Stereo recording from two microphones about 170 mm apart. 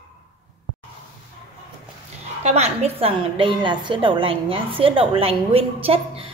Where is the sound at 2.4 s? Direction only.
40° right (ahead or behind).